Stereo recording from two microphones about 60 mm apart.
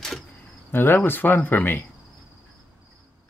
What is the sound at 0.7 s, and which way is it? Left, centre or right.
Cricket, left.